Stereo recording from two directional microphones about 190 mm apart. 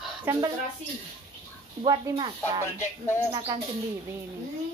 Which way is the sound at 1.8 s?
25° right (ahead or behind).